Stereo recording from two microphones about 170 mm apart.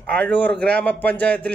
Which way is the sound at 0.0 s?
5° left (ahead or behind).